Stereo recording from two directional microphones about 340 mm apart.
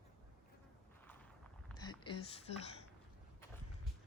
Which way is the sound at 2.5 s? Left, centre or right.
Centre.